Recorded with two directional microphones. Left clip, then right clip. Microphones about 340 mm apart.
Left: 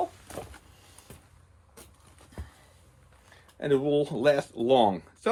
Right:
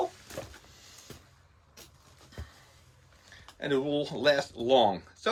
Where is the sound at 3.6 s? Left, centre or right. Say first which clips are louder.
Left 4 dB; centre.